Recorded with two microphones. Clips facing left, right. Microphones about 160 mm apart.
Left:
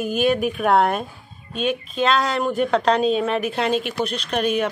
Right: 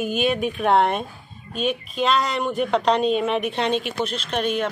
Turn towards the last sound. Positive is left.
turn(degrees=5)  # may be behind; listen again after turning